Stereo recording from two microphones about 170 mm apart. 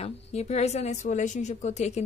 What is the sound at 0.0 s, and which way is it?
A woman's voice, 40° left (ahead or behind).